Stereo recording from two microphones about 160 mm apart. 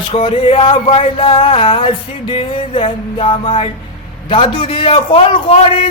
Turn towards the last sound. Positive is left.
turn(degrees=30)  # may be behind; listen again after turning